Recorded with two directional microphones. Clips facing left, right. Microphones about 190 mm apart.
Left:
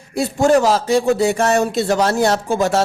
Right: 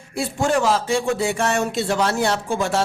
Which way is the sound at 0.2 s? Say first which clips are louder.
Left 6 dB; 40° left (ahead or behind).